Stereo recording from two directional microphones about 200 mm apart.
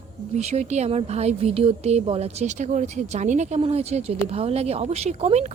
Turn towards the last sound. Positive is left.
turn(degrees=-35)  # may be behind; listen again after turning